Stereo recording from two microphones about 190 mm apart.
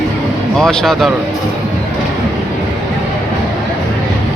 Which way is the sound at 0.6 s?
5° left (ahead or behind).